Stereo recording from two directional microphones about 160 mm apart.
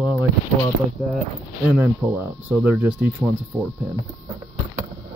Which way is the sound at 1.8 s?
10° right (ahead or behind).